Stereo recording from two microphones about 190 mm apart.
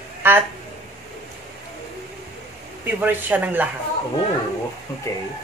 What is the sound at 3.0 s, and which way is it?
Speech, 10° right (ahead or behind).